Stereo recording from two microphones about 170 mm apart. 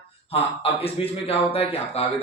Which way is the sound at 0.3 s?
35° left (ahead or behind).